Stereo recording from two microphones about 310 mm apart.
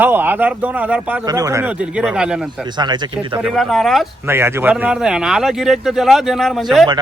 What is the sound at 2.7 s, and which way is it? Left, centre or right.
Speech, centre.